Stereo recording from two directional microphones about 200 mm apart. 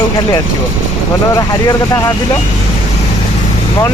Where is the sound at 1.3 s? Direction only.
15° left (ahead or behind).